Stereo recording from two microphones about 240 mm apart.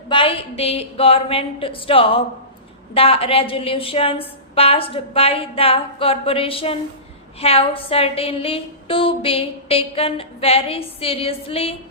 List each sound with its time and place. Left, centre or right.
0.1 s a woman's voice: left